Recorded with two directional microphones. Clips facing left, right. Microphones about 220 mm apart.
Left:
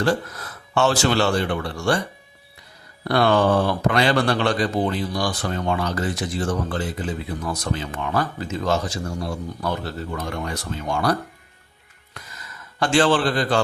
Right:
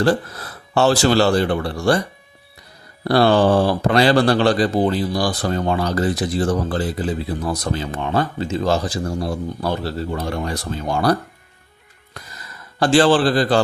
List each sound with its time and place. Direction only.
0.0 s speech: 35° right (ahead or behind)
3.0 s speech: 35° right (ahead or behind)
12.1 s a sound: 35° right (ahead or behind)